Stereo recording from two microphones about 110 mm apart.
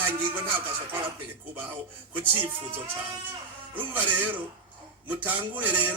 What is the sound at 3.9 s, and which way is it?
A man's voice, 15° right (ahead or behind).